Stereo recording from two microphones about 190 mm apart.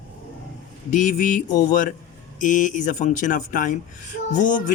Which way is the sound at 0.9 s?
40° left (ahead or behind).